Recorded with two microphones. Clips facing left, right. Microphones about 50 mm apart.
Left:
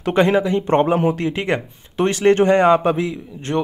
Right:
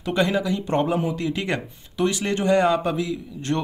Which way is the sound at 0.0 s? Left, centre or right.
Left.